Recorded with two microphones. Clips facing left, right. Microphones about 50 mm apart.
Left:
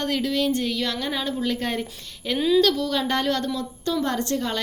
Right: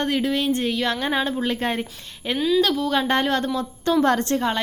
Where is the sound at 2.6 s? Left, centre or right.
Centre.